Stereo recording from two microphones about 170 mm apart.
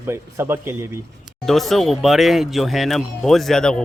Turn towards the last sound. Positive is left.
turn(degrees=5)  # may be behind; listen again after turning